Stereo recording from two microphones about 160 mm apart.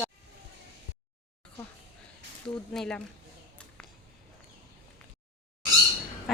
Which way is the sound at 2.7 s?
5° left (ahead or behind).